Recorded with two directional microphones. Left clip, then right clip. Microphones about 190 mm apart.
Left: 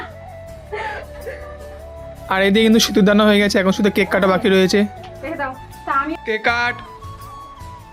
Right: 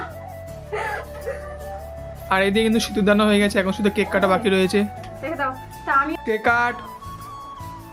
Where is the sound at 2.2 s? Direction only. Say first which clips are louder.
Left 4 dB; 40° left (ahead or behind).